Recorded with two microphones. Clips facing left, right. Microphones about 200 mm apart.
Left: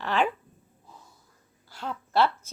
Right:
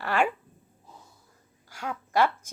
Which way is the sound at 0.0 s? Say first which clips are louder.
Even; 10° right (ahead or behind).